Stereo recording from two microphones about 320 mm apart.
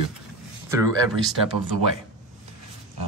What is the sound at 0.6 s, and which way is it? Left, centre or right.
Speech, centre.